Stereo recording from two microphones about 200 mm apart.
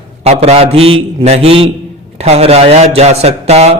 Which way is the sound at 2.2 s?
30° right (ahead or behind).